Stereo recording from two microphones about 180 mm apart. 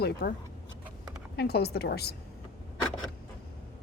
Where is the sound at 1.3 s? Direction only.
60° left (ahead or behind).